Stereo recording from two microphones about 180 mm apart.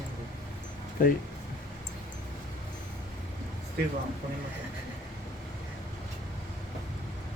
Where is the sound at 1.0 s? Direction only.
50° left (ahead or behind).